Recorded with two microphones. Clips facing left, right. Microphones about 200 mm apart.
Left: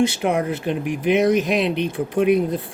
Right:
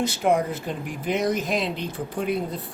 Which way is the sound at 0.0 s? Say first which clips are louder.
Left 3 dB; 70° left (ahead or behind).